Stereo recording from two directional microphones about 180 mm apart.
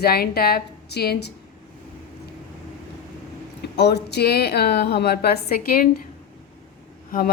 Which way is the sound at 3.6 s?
65° left (ahead or behind).